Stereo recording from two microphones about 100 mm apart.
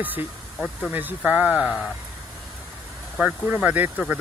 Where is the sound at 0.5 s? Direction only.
Centre (ahead or behind).